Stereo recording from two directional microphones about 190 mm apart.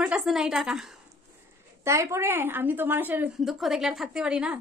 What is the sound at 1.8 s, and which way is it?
Speech, 15° right (ahead or behind).